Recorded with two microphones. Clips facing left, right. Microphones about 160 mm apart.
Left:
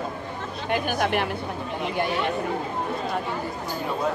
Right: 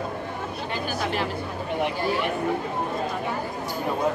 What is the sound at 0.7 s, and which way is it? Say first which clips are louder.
Chatter: left 6 dB; 60° left (ahead or behind).